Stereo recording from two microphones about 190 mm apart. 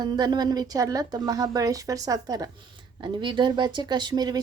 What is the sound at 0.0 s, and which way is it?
A woman's voice, 20° right (ahead or behind).